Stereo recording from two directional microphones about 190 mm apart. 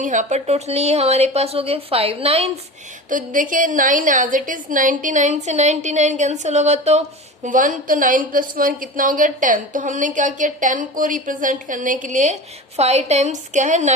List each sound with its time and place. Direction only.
0.0 s a woman's voice: 40° right (ahead or behind)
3.1 s a woman's voice: 45° right (ahead or behind)